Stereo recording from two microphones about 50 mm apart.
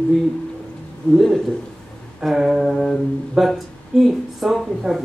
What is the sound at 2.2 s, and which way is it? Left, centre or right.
Speech, centre.